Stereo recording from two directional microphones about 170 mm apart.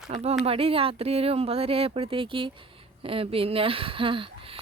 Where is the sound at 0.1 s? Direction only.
40° right (ahead or behind).